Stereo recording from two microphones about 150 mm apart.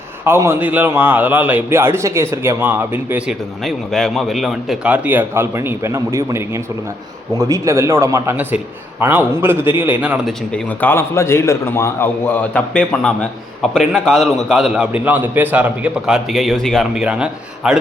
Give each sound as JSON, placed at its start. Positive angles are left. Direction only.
{"t": 0.3, "sound": "a man's voice", "side_deg": -15}
{"t": 10.2, "sound": "a man's voice", "side_deg": 10}